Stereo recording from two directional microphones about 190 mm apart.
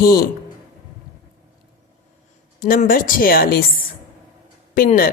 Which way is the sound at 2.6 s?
50° left (ahead or behind).